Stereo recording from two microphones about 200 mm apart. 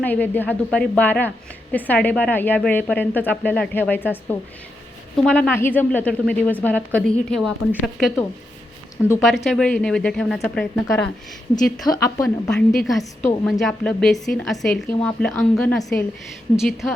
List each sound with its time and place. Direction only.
0.0 s a woman's voice: 10° left (ahead or behind)
11.8 s a woman's voice: 15° left (ahead or behind)
12.5 s a woman's voice: 5° left (ahead or behind)
15.8 s a woman's voice: 15° left (ahead or behind)
16.6 s a woman's voice: centre (ahead or behind)